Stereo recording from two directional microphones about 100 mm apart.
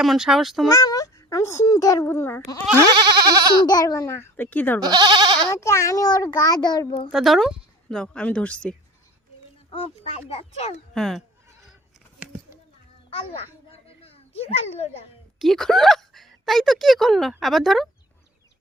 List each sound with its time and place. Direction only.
0.0 s speech: 5° right (ahead or behind)
0.7 s a child's voice: 35° left (ahead or behind)
2.0 s a child's voice: 20° left (ahead or behind)
3.0 s bleat: 45° right (ahead or behind)
3.7 s a child's voice: 40° left (ahead or behind); by 4.8 s 15° left (ahead or behind)
4.8 s bleat: 45° right (ahead or behind)
5.5 s a child's voice: 30° left (ahead or behind)
7.1 s a woman's voice: centre (ahead or behind)
9.7 s a child's voice: 85° left
10.9 s speech: centre (ahead or behind)
13.1 s a child's voice: 75° left (ahead or behind); by 15.0 s 90° left
15.4 s speech: 5° left (ahead or behind)